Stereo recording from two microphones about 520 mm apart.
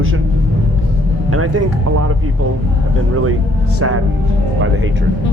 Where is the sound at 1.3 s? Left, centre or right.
Right.